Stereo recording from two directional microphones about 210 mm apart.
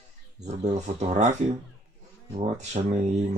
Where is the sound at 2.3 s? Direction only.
35° right (ahead or behind).